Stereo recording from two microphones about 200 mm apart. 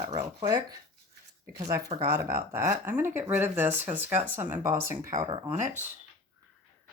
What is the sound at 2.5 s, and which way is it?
Speech, 10° right (ahead or behind).